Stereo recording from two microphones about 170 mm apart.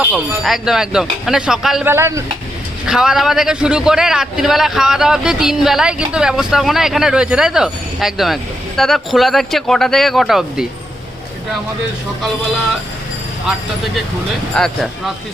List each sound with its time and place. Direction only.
0.0 s a man's voice: centre (ahead or behind)
1.9 s speech: 15° right (ahead or behind)
2.8 s a man's voice: 5° right (ahead or behind)
14.5 s a man's voice: centre (ahead or behind)